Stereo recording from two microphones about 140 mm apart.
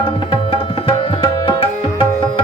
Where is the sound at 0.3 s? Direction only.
40° left (ahead or behind).